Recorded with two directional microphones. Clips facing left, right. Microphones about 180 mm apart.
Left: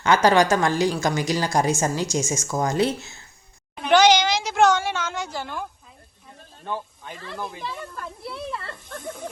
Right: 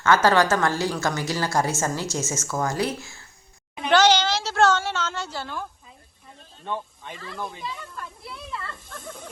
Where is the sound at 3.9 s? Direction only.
15° left (ahead or behind).